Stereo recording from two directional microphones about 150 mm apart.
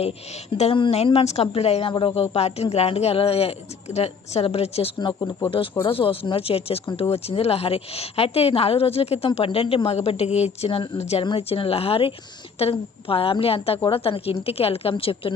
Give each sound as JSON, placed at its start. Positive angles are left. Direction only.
{"t": 0.5, "sound": "a woman's voice", "side_deg": 40}
{"t": 4.9, "sound": "a woman's voice", "side_deg": 30}